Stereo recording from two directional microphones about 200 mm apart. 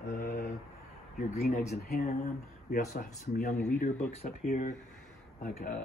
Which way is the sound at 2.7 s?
45° left (ahead or behind).